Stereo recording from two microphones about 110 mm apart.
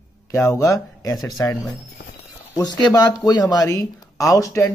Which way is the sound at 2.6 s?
35° left (ahead or behind).